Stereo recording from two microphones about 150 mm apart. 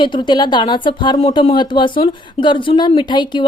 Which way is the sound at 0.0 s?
30° left (ahead or behind).